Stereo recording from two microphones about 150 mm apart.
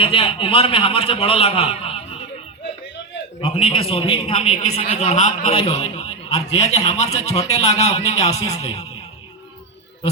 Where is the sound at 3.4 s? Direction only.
40° left (ahead or behind).